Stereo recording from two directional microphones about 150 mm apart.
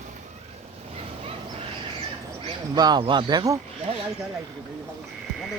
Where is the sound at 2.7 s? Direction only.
25° right (ahead or behind).